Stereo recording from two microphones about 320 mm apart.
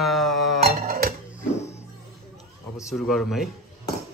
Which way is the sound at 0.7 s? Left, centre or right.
Right.